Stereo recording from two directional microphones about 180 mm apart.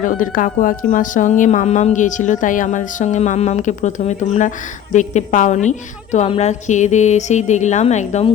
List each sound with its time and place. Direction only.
0.0 s speech: 50° left (ahead or behind)